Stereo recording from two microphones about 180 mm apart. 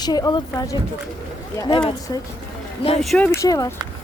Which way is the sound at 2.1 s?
20° left (ahead or behind).